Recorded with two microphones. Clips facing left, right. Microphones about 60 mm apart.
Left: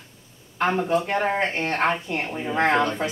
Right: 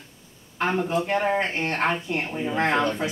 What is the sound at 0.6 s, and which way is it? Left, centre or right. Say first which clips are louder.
Speech: left 2 dB; centre.